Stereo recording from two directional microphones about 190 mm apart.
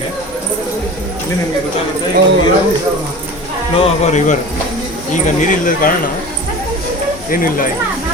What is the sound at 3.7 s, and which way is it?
Speech, 35° left (ahead or behind).